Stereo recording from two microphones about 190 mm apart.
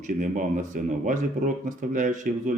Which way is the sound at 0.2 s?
45° right (ahead or behind).